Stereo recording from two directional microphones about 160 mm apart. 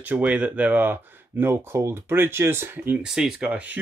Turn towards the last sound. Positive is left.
turn(degrees=-10)  # may be behind; listen again after turning